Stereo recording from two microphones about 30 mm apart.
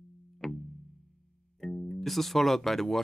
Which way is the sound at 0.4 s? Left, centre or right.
Centre.